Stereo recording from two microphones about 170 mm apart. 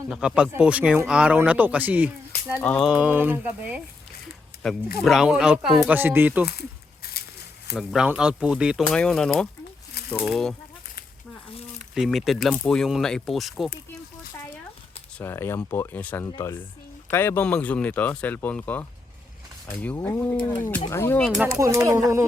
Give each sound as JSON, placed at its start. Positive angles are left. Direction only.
{"t": 0.1, "sound": "speech", "side_deg": -5}
{"t": 2.6, "sound": "speech", "side_deg": 5}
{"t": 2.9, "sound": "speech", "side_deg": -10}
{"t": 4.5, "sound": "a sound", "side_deg": 65}
{"t": 5.0, "sound": "speech", "side_deg": -5}
{"t": 6.4, "sound": "a sound", "side_deg": 65}
{"t": 7.8, "sound": "speech", "side_deg": -5}
{"t": 11.9, "sound": "speech", "side_deg": 0}
{"t": 15.2, "sound": "speech", "side_deg": 15}
{"t": 21.4, "sound": "speech", "side_deg": -15}